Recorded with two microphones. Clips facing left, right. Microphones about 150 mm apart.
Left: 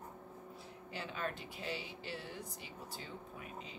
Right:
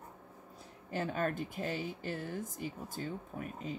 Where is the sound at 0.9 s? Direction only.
50° right (ahead or behind).